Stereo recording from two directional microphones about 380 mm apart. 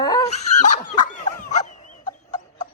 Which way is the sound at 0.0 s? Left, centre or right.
Centre.